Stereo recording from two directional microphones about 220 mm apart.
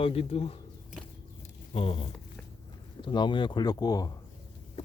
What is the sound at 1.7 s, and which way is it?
Speech, 25° left (ahead or behind).